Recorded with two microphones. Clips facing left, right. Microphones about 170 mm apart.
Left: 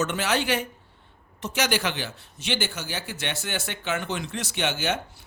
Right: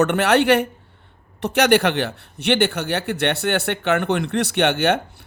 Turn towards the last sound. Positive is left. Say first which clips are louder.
# right 9 dB
turn(degrees=-60)  # may be behind; listen again after turning